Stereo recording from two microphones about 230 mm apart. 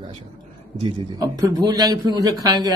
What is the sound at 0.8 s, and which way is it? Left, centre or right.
A man's voice, right.